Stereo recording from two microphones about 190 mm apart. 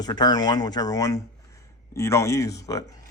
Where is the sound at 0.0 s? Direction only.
20° left (ahead or behind).